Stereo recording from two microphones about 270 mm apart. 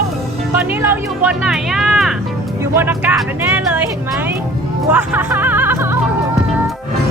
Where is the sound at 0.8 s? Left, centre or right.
Centre.